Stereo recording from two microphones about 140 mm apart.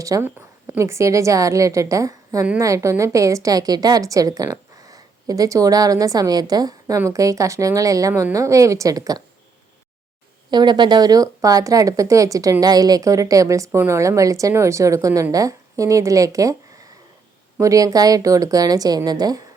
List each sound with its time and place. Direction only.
0.0 s a woman's voice: 20° right (ahead or behind)
10.5 s a woman's voice: 30° right (ahead or behind)
17.6 s a woman's voice: 25° right (ahead or behind)